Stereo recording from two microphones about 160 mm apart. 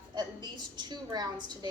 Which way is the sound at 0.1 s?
25° right (ahead or behind).